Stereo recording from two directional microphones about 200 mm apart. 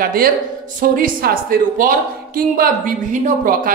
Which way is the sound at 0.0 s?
45° right (ahead or behind).